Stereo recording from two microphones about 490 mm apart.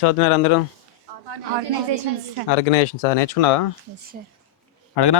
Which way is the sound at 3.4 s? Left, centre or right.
Left.